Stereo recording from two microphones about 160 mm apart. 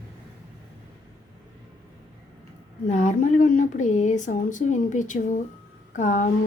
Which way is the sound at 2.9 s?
50° left (ahead or behind).